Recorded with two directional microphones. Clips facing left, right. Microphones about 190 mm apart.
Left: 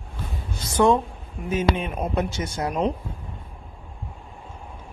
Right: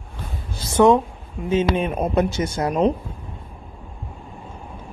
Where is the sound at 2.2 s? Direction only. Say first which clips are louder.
Right 7 dB; 60° right (ahead or behind).